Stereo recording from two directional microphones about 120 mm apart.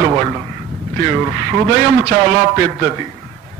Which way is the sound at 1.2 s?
25° right (ahead or behind).